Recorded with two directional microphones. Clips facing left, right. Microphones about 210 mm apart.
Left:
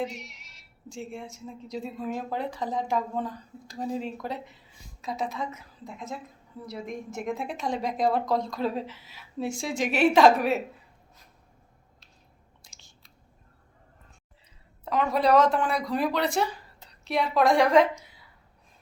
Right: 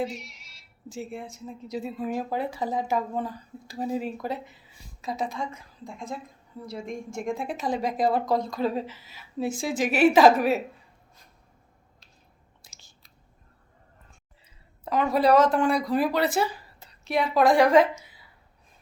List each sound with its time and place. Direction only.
0.2 s a sound: 20° left (ahead or behind)
0.9 s a woman's voice: 5° right (ahead or behind)
12.6 s chewing: 5° right (ahead or behind)
14.8 s speech: centre (ahead or behind)